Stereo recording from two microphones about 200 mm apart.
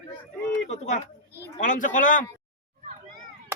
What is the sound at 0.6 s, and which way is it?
A man's voice, 35° left (ahead or behind).